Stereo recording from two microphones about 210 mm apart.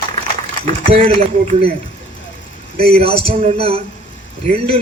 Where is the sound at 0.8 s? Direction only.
30° right (ahead or behind).